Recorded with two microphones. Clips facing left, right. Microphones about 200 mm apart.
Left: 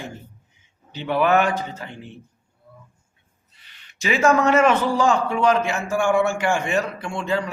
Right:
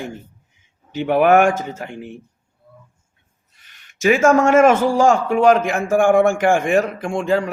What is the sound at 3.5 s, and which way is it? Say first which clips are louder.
A man's voice: even; 45° right (ahead or behind).